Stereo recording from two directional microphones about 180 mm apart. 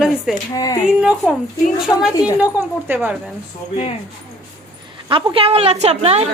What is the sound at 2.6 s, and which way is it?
Speech, 10° right (ahead or behind).